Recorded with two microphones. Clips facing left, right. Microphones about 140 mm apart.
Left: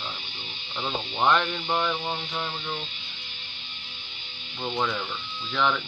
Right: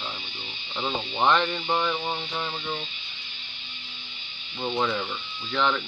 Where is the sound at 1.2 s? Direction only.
Centre (ahead or behind).